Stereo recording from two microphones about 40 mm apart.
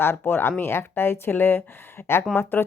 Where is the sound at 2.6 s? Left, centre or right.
Left.